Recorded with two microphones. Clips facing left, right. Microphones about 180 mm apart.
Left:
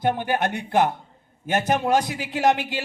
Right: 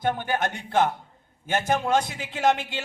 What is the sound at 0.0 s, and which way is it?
Speech, 10° left (ahead or behind).